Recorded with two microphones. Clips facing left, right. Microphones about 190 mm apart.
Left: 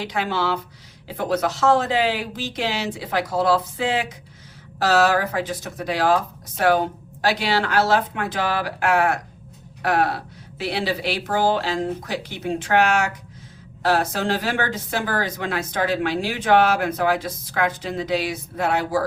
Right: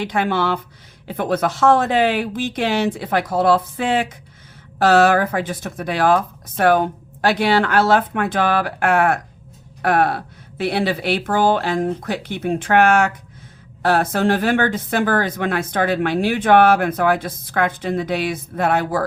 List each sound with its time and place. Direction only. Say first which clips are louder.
0.0 s speech: right 4 dB; 55° right (ahead or behind)